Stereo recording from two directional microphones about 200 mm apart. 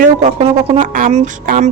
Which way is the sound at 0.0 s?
35° right (ahead or behind).